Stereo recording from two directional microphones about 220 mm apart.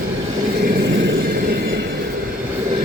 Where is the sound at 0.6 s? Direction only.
50° right (ahead or behind).